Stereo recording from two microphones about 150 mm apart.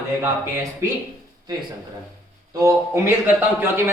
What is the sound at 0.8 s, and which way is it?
Speech, 20° right (ahead or behind).